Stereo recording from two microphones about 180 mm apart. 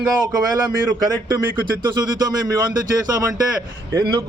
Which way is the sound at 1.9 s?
20° right (ahead or behind).